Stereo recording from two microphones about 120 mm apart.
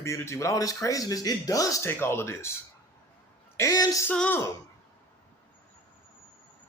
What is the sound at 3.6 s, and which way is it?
Speech, 30° left (ahead or behind).